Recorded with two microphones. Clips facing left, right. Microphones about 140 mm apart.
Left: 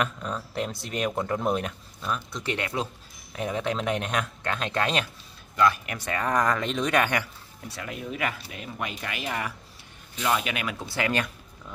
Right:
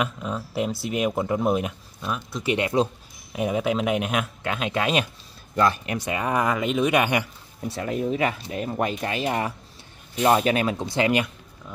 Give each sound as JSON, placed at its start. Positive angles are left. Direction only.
{"t": 0.0, "sound": "speech", "side_deg": -5}
{"t": 2.5, "sound": "speech", "side_deg": -20}
{"t": 5.6, "sound": "speech", "side_deg": -30}
{"t": 5.9, "sound": "speech", "side_deg": -10}
{"t": 7.7, "sound": "speech", "side_deg": -35}
{"t": 10.9, "sound": "speech", "side_deg": -20}